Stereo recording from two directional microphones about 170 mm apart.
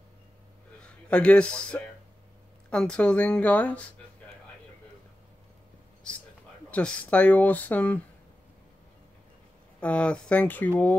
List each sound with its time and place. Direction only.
0.8 s a man's voice: 5° left (ahead or behind)
6.7 s speech: 5° left (ahead or behind)
9.8 s speech: 5° left (ahead or behind)